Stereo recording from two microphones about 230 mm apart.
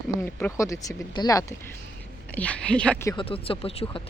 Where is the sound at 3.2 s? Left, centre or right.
Left.